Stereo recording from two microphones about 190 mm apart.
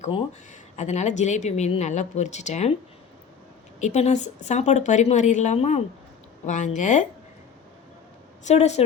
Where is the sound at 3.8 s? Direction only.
35° left (ahead or behind).